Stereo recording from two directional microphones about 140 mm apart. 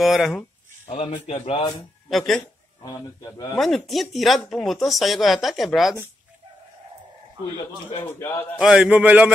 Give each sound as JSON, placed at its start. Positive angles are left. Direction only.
{"t": 0.0, "sound": "speech", "side_deg": 0}
{"t": 0.8, "sound": "a man's voice", "side_deg": 50}
{"t": 2.0, "sound": "speech", "side_deg": 0}
{"t": 2.8, "sound": "a man's voice", "side_deg": 30}
{"t": 3.5, "sound": "speech", "side_deg": 0}
{"t": 8.2, "sound": "a man's voice", "side_deg": 20}
{"t": 8.5, "sound": "a man's voice", "side_deg": -5}